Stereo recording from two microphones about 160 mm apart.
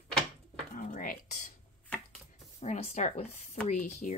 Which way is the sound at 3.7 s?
50° left (ahead or behind).